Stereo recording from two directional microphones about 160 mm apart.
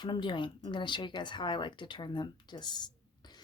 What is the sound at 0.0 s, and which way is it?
A woman's voice, 30° left (ahead or behind).